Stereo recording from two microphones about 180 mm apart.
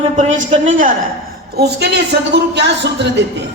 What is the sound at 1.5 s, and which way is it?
A man's voice, 65° right (ahead or behind).